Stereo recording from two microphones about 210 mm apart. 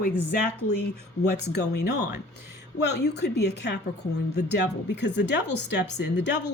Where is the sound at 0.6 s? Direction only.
90° left.